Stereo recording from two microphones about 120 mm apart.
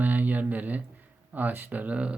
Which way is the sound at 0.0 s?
15° right (ahead or behind).